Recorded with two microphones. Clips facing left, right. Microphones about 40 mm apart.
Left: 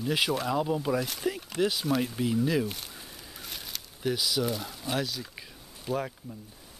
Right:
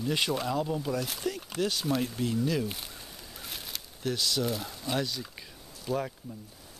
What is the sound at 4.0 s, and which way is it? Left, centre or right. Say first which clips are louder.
Speech: left 2 dB; centre.